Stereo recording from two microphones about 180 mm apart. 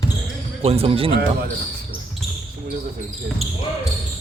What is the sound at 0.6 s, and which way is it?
Speech, 35° right (ahead or behind).